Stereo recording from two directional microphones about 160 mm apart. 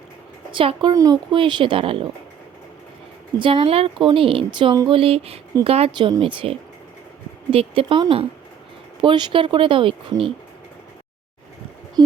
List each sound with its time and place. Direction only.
0.5 s a woman's voice: 35° right (ahead or behind)
3.3 s a woman's voice: 35° right (ahead or behind)
12.0 s speech: 25° right (ahead or behind)